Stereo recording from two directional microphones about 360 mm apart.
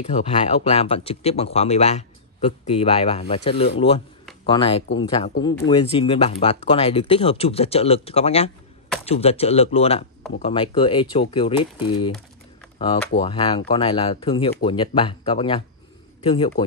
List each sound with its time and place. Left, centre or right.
0.0 s a man's voice: centre